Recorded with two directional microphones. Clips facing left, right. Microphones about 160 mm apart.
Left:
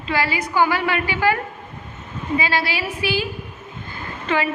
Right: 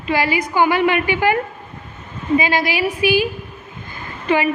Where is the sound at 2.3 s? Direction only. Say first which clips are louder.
Right 4 dB; 15° right (ahead or behind).